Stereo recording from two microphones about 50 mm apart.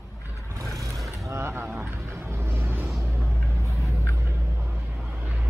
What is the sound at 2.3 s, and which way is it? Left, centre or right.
Vehicle, right.